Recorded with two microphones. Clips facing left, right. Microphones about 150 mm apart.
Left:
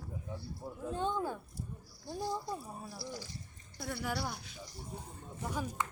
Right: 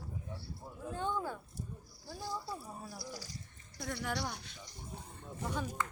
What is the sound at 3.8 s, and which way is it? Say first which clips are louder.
Speech: left 1 dB; 5° left (ahead or behind).